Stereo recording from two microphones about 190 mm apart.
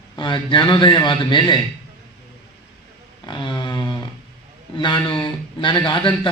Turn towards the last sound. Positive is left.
turn(degrees=25)  # may be behind; listen again after turning